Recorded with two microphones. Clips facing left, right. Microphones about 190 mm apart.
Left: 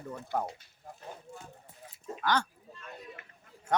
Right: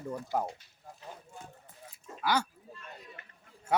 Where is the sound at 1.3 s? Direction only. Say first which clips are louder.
Left 2 dB; 35° left (ahead or behind).